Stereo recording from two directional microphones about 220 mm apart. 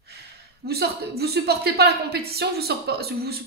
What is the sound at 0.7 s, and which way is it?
A woman's voice, 45° right (ahead or behind).